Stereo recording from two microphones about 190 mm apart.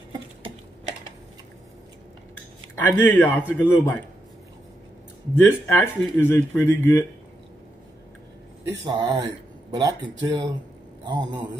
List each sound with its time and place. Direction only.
2.7 s speech: 10° left (ahead or behind)
5.3 s speech: 10° left (ahead or behind)
8.6 s speech: 20° right (ahead or behind)